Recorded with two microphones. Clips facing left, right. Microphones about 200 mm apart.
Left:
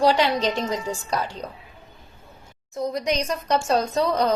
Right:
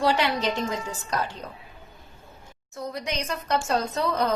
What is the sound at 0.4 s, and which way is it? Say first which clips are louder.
Speech: left 3 dB; 15° left (ahead or behind).